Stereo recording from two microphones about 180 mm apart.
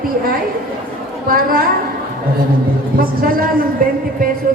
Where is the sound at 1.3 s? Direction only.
55° right (ahead or behind).